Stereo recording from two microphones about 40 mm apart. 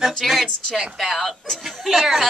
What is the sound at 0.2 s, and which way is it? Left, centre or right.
Speech, centre.